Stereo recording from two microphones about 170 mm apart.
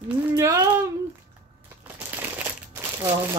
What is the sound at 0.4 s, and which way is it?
Speech, 20° right (ahead or behind).